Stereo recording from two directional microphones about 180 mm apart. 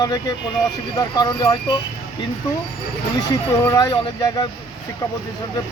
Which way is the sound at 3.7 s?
20° left (ahead or behind).